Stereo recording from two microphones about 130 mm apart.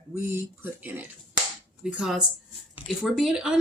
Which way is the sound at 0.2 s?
15° right (ahead or behind).